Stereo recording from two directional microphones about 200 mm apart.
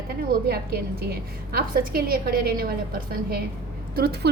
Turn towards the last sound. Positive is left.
turn(degrees=-55)  # may be behind; listen again after turning